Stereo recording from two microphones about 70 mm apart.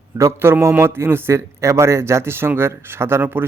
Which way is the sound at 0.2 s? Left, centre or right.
Right.